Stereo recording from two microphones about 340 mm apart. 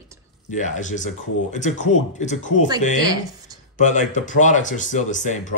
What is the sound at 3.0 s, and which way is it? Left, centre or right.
Speech, centre.